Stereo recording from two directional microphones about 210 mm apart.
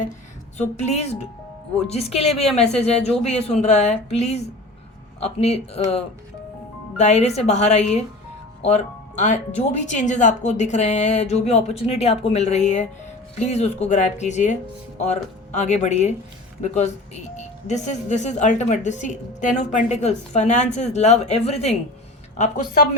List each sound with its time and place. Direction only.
0.5 s speech: 30° left (ahead or behind)